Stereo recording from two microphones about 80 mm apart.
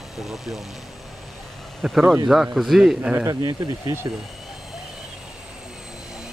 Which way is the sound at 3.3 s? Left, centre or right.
Right.